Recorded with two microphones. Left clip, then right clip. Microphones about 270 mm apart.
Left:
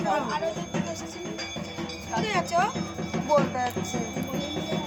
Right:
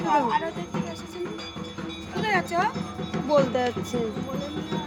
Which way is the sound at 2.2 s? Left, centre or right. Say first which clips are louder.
Right 1 dB; centre.